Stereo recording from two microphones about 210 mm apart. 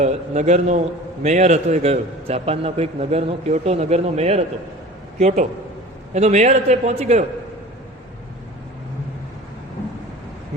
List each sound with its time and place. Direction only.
0.0 s a man's voice: 35° right (ahead or behind)
6.1 s a man's voice: 30° right (ahead or behind)